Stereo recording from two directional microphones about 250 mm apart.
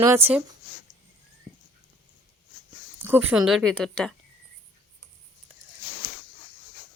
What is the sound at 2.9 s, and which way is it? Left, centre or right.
Speech, centre.